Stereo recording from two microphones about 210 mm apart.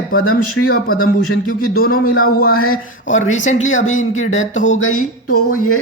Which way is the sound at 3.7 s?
70° left (ahead or behind).